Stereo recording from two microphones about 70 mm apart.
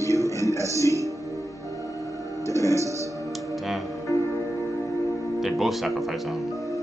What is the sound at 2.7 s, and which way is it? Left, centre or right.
Music, right.